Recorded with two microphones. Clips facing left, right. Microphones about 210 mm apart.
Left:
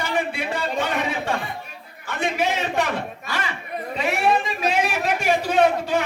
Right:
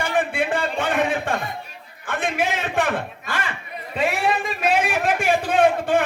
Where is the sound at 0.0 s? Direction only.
50° right (ahead or behind).